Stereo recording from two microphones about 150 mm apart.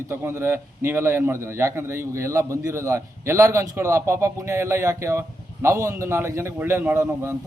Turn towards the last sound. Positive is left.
turn(degrees=-15)  # may be behind; listen again after turning